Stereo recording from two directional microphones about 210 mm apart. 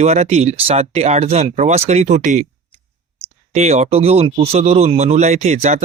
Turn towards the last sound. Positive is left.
turn(degrees=-30)  # may be behind; listen again after turning